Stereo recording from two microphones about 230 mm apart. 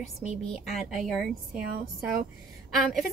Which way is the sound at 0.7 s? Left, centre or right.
Centre.